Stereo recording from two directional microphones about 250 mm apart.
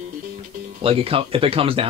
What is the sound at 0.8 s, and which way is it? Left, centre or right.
Speech, right.